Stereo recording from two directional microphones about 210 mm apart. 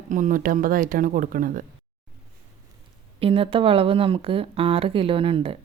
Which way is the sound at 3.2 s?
25° right (ahead or behind).